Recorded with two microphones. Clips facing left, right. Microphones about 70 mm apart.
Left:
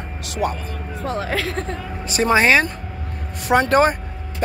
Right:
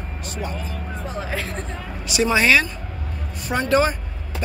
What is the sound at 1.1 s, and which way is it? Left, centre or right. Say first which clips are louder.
Speech: left 6 dB; left.